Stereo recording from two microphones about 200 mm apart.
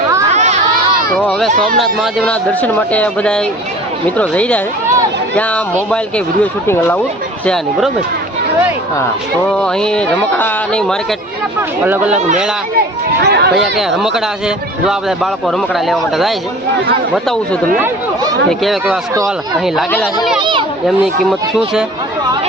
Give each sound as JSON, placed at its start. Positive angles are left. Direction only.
{"t": 0.3, "sound": "a sound", "side_deg": -35}
{"t": 1.2, "sound": "speech", "side_deg": 0}
{"t": 9.5, "sound": "speech", "side_deg": 5}
{"t": 11.8, "sound": "speech", "side_deg": -5}
{"t": 13.2, "sound": "speech", "side_deg": -55}
{"t": 13.7, "sound": "speech", "side_deg": 0}
{"t": 17.7, "sound": "speech", "side_deg": -10}
{"t": 18.6, "sound": "speech", "side_deg": 0}
{"t": 20.4, "sound": "a child's voice", "side_deg": -25}